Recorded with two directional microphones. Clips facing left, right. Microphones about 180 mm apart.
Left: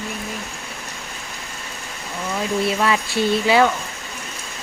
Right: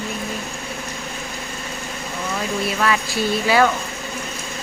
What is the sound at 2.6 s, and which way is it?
Speech, 25° left (ahead or behind).